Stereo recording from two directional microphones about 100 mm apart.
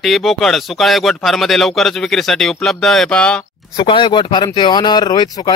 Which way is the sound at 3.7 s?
55° left (ahead or behind).